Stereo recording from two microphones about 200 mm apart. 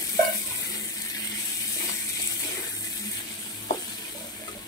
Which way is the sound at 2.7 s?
15° left (ahead or behind).